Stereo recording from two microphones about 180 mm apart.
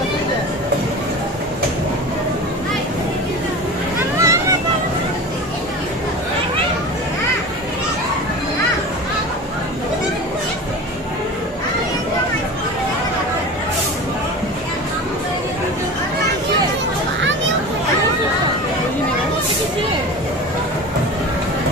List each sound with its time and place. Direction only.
4.2 s vehicle: 15° right (ahead or behind)